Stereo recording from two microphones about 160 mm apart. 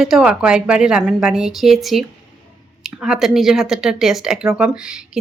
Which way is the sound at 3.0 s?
Centre (ahead or behind).